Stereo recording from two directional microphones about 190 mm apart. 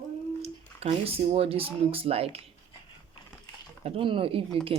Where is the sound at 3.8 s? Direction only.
30° right (ahead or behind).